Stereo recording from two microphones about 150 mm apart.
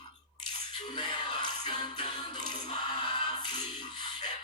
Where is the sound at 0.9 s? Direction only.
30° left (ahead or behind).